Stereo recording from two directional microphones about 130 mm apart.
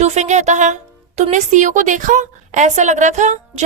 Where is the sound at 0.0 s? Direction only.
60° right (ahead or behind).